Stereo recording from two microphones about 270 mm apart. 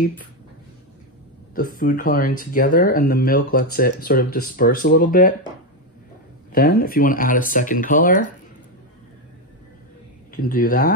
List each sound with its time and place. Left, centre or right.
1.5 s speech: left
6.5 s speech: left
10.3 s speech: left